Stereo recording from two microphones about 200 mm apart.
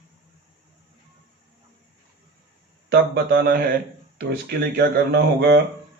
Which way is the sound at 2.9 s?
55° right (ahead or behind).